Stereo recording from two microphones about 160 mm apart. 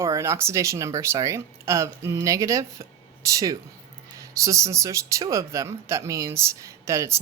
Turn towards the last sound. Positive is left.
turn(degrees=-20)  # may be behind; listen again after turning